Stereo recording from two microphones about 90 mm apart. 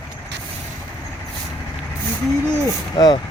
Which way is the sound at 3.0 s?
55° left (ahead or behind).